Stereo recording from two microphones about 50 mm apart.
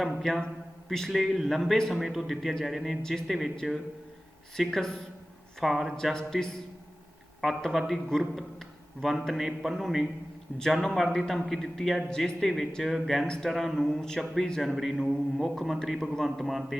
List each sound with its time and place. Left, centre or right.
0.0 s a man's voice: centre
1.1 s a man's voice: centre
3.0 s a man's voice: centre
3.2 s a man's voice: centre
4.6 s a man's voice: centre
6.0 s a man's voice: centre
7.4 s a man's voice: centre
12.0 s a man's voice: centre
13.2 s a man's voice: centre
13.5 s a man's voice: centre